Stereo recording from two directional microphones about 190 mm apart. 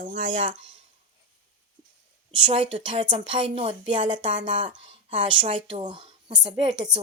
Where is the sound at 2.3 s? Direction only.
25° right (ahead or behind).